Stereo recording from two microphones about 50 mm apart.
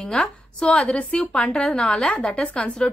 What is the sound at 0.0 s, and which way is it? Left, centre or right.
A woman's voice, centre.